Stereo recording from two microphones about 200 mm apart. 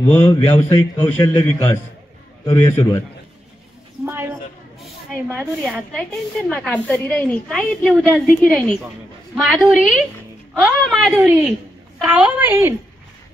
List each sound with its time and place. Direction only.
0.0 s a man's voice: 10° left (ahead or behind)
0.3 s a man's voice: 25° left (ahead or behind)
1.3 s a man's voice: 10° left (ahead or behind)
4.0 s a sound: 10° right (ahead or behind)
4.7 s a man's voice: centre (ahead or behind)